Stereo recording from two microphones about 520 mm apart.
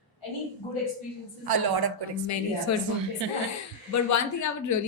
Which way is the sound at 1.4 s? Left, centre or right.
Right.